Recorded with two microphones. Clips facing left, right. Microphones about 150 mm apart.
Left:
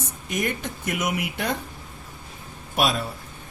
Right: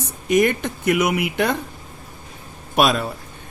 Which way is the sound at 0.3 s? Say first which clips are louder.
Right 10 dB; 75° right (ahead or behind).